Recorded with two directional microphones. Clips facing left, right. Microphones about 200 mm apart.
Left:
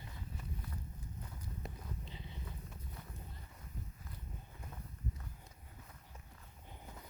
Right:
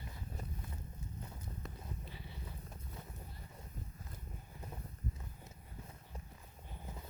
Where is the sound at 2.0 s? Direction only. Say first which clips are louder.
Even; 20° left (ahead or behind).